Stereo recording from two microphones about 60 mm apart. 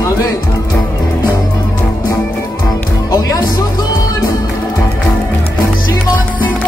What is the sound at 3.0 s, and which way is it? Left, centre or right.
Music, left.